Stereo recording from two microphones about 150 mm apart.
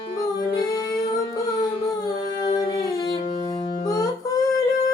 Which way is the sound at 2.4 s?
25° left (ahead or behind).